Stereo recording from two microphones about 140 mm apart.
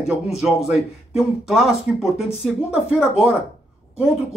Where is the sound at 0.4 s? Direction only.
Centre (ahead or behind).